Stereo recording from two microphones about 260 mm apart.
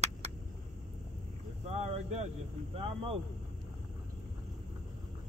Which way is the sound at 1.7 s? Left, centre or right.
Right.